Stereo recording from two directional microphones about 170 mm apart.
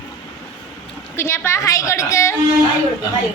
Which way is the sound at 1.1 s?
15° left (ahead or behind).